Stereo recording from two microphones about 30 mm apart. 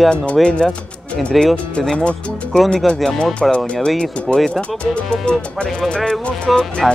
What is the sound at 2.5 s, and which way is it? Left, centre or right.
Speech, left.